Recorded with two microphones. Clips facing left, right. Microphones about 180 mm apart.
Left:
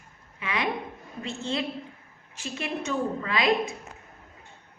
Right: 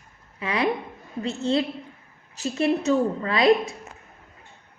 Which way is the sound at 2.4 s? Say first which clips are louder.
Right 9 dB; 35° right (ahead or behind).